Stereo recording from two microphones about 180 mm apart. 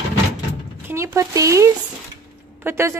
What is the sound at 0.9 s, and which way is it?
A woman's voice, 15° right (ahead or behind).